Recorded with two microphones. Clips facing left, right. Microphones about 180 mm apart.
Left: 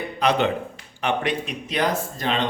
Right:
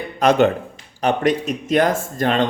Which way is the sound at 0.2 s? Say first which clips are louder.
Right 6 dB; 45° right (ahead or behind).